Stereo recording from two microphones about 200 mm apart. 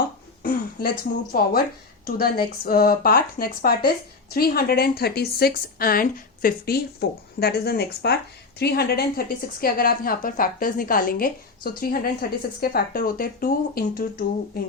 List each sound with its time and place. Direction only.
0.4 s speech: 50° left (ahead or behind)